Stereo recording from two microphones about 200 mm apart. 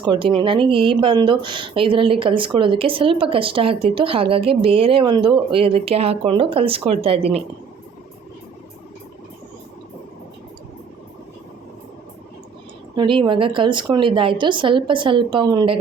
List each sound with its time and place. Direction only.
0.0 s speech: 25° right (ahead or behind)
13.0 s speech: 25° right (ahead or behind)